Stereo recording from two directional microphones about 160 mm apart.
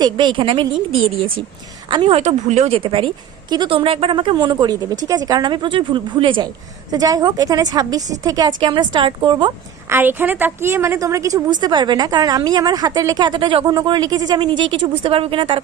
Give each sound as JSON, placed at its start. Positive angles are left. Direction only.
{"t": 0.0, "sound": "a woman's voice", "side_deg": -30}
{"t": 9.9, "sound": "a woman's voice", "side_deg": -15}